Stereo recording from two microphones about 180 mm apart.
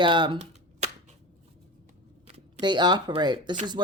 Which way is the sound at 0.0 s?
25° right (ahead or behind).